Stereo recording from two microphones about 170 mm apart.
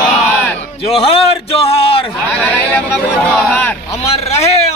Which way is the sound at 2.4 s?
5° left (ahead or behind).